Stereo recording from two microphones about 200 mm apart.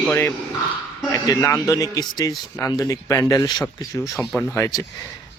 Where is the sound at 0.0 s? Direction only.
10° left (ahead or behind).